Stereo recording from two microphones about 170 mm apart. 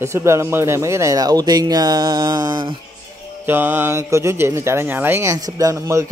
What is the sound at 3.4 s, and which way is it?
Speech, 10° right (ahead or behind).